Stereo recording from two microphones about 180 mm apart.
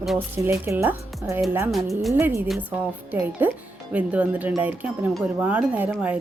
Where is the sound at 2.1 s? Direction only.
10° right (ahead or behind).